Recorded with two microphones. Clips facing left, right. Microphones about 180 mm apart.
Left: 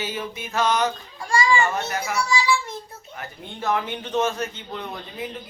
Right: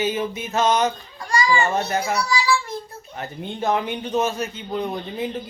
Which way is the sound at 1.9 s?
25° right (ahead or behind).